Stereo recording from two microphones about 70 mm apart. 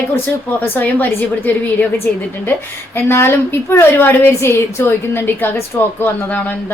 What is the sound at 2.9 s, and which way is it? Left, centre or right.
A woman's voice, left.